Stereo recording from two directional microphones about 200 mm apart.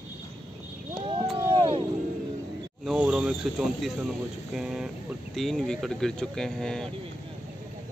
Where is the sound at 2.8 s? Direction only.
5° right (ahead or behind).